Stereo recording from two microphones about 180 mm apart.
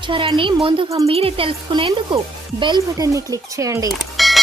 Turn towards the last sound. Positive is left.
turn(degrees=0)  # may be behind; listen again after turning